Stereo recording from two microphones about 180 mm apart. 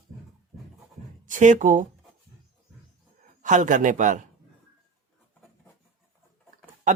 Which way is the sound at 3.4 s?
45° right (ahead or behind).